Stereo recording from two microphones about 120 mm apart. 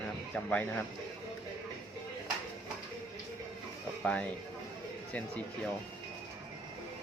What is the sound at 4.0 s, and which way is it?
Speech, 10° left (ahead or behind).